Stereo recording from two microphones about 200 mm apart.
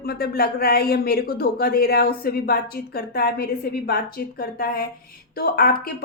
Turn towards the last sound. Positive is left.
turn(degrees=45)  # may be behind; listen again after turning